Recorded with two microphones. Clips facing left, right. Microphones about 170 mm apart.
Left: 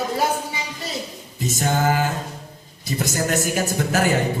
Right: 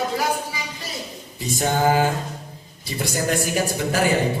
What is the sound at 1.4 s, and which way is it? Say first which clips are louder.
Mantra: even; 45° left (ahead or behind).